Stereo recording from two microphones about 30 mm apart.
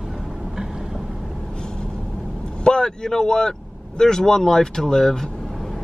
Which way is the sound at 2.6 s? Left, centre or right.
Left.